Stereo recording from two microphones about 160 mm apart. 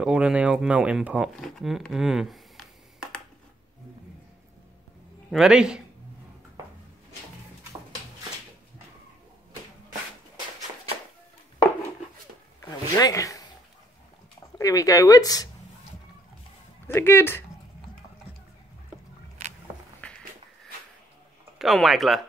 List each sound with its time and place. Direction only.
0.0 s speech: 5° right (ahead or behind)
5.3 s speech: 5° right (ahead or behind)
12.6 s zipper: 25° left (ahead or behind)
14.6 s speech: 20° left (ahead or behind)
16.8 s speech: 15° left (ahead or behind)
20.0 s walk: 10° left (ahead or behind)
21.5 s speech: centre (ahead or behind)